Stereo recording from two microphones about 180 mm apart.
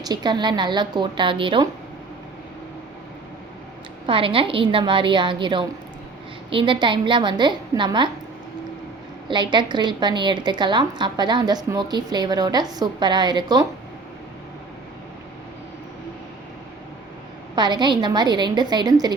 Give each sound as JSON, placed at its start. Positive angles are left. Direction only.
{"t": 0.0, "sound": "a woman's voice", "side_deg": -25}
{"t": 4.0, "sound": "a woman's voice", "side_deg": -30}
{"t": 9.3, "sound": "a woman's voice", "side_deg": -25}
{"t": 17.5, "sound": "a woman's voice", "side_deg": -25}